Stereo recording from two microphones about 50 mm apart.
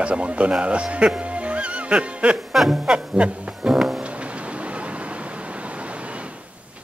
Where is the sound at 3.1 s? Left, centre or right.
Right.